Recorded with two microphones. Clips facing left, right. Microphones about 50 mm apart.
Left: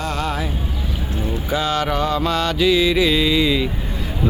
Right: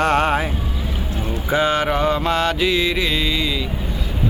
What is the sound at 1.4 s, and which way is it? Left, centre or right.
Mantra, right.